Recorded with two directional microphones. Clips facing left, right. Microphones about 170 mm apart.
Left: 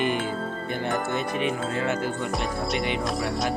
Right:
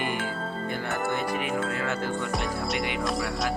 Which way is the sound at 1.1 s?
25° left (ahead or behind).